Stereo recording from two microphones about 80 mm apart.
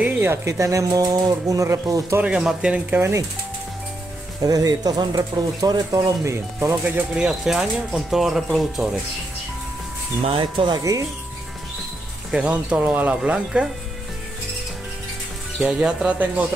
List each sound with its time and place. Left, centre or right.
0.0 s a sound: right
0.5 s speech: right
2.2 s speech: centre
3.0 s speech: right
4.4 s speech: right
5.9 s speech: right
7.2 s speech: centre
10.4 s speech: right
10.8 s speech: right
12.3 s speech: centre
13.2 s speech: centre
15.6 s speech: centre